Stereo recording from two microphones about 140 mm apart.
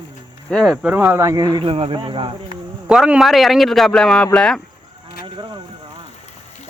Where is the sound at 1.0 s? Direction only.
20° right (ahead or behind).